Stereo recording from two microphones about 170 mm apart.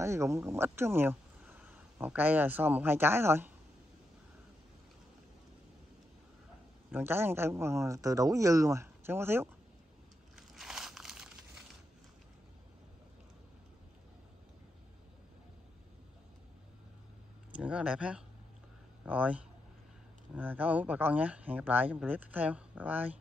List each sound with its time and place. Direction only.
0.0 s speech: 15° right (ahead or behind)
6.9 s speech: 15° right (ahead or behind)
10.3 s crunch: 5° right (ahead or behind)
17.6 s speech: 5° right (ahead or behind)